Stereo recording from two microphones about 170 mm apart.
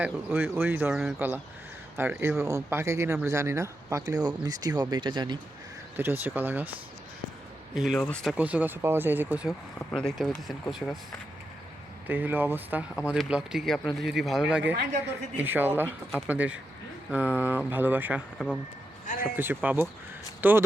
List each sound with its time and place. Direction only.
0.0 s speech: 10° right (ahead or behind)
6.0 s speech: 10° right (ahead or behind)
7.9 s speech: 5° left (ahead or behind)
9.7 s speech: 5° left (ahead or behind)
12.0 s speech: 10° right (ahead or behind)